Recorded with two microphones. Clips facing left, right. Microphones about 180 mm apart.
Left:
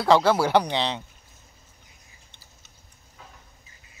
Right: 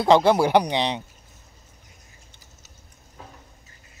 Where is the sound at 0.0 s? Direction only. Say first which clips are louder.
Right 2 dB; 20° right (ahead or behind).